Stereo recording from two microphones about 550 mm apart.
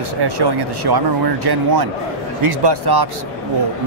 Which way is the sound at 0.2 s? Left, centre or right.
Right.